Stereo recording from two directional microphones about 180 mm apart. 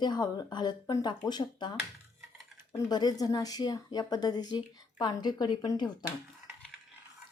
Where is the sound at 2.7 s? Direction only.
20° left (ahead or behind).